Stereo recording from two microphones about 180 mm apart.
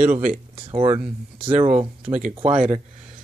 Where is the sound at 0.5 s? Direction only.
30° right (ahead or behind).